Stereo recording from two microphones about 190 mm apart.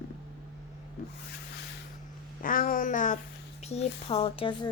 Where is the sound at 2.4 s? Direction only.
50° left (ahead or behind).